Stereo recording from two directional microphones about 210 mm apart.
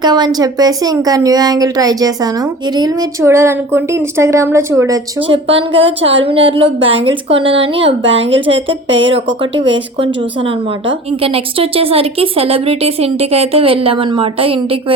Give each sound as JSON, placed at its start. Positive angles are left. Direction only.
{"t": 0.0, "sound": "a woman's voice", "side_deg": -20}
{"t": 5.5, "sound": "speech", "side_deg": -25}
{"t": 8.9, "sound": "speech", "side_deg": -65}
{"t": 9.1, "sound": "speech", "side_deg": -25}